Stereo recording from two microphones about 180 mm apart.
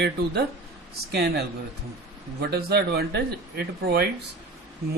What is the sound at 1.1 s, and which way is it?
Speech, 65° right (ahead or behind).